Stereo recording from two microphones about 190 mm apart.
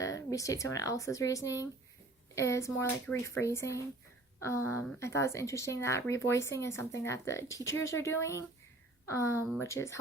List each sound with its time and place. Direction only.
0.0 s speech: 15° left (ahead or behind)